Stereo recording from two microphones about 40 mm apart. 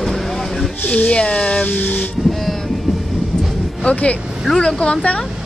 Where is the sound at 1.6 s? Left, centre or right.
Left.